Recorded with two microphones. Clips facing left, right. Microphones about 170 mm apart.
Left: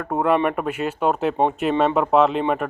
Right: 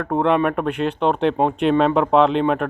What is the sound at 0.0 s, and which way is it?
Speech, 5° left (ahead or behind).